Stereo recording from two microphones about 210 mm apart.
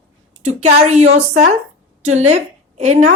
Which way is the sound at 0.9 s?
30° right (ahead or behind).